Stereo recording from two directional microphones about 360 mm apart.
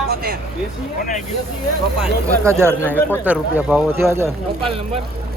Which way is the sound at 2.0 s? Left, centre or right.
Centre.